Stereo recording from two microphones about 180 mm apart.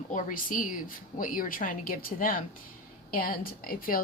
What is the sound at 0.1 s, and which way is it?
Speech, 45° left (ahead or behind).